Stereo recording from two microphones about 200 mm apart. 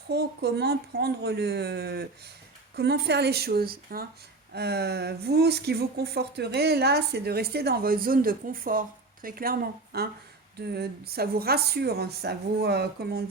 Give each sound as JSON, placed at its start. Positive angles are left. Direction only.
{"t": 0.1, "sound": "speech", "side_deg": -55}